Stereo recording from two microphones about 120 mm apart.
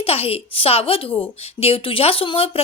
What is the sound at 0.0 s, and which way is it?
A woman's voice, 55° left (ahead or behind).